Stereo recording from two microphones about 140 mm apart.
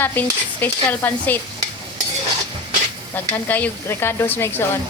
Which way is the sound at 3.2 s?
15° left (ahead or behind).